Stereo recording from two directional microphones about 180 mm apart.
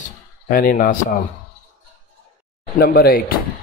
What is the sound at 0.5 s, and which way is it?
Speech, 50° left (ahead or behind).